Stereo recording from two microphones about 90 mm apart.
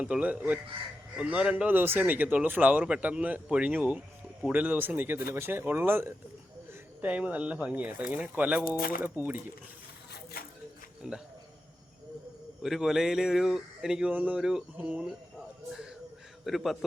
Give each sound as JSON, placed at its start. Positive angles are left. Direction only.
{"t": 0.0, "sound": "speech", "side_deg": -15}
{"t": 11.0, "sound": "speech", "side_deg": -5}
{"t": 12.6, "sound": "speech", "side_deg": -5}
{"t": 16.4, "sound": "a man's voice", "side_deg": 0}